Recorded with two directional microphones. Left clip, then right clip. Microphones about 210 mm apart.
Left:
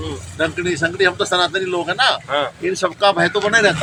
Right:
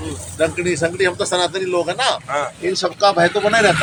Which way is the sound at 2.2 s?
40° left (ahead or behind).